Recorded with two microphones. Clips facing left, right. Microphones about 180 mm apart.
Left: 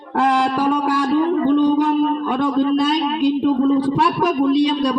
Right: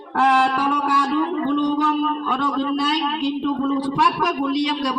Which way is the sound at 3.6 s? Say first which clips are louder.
Left 4 dB; 30° left (ahead or behind).